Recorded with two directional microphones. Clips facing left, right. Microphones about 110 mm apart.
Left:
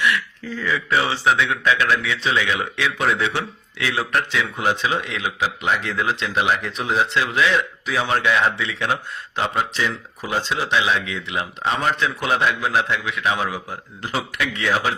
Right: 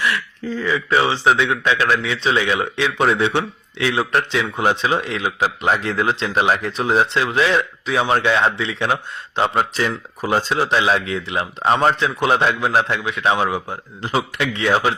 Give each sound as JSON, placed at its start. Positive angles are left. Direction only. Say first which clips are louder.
{"t": 0.0, "sound": "speech", "louder": "even", "side_deg": -30}
{"t": 9.6, "sound": "speech", "louder": "right 3 dB", "side_deg": -45}